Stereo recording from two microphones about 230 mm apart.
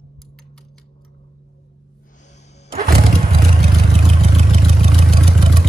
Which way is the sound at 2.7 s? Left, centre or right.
Right.